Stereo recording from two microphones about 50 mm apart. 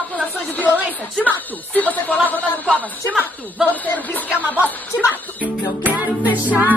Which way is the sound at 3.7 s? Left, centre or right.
Left.